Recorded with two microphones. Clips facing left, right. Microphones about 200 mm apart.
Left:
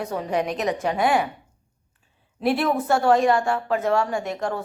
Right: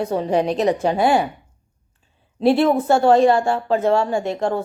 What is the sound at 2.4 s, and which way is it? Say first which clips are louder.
Speech: right 6 dB; 25° right (ahead or behind).